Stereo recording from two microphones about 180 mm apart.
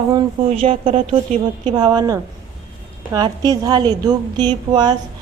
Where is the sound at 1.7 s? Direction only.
20° right (ahead or behind).